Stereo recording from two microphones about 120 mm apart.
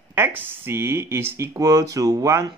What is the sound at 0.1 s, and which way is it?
Speech, 15° right (ahead or behind).